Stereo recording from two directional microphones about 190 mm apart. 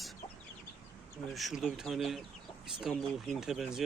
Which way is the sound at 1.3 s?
Centre (ahead or behind).